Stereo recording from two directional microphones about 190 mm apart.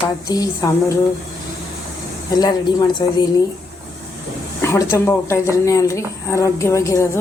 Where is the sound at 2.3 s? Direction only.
20° left (ahead or behind).